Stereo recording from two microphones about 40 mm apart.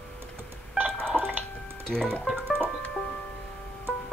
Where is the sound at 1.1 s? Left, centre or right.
Centre.